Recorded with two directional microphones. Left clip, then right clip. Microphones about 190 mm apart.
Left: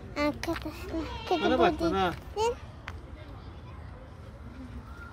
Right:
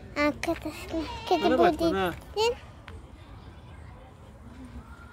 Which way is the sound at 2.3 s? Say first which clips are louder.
Right 6 dB; 25° right (ahead or behind).